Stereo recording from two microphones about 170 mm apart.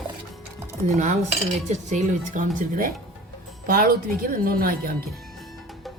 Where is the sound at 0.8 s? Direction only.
45° right (ahead or behind).